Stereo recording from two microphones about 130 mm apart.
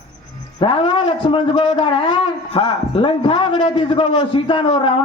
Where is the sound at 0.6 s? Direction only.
40° left (ahead or behind).